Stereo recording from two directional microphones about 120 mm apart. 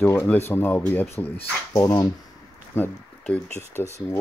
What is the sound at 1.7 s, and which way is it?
Speech, 30° left (ahead or behind).